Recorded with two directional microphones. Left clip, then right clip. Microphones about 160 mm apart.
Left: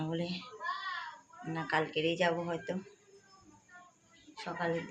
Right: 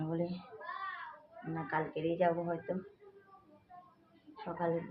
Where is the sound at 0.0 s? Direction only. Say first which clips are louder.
Even; 15° left (ahead or behind).